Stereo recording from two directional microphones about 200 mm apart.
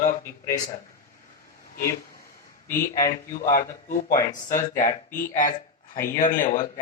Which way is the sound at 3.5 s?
45° left (ahead or behind).